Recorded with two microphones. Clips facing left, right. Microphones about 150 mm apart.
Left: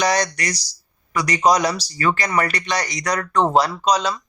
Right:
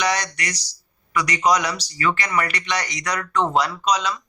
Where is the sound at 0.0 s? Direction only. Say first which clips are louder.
Left 4 dB; 35° left (ahead or behind).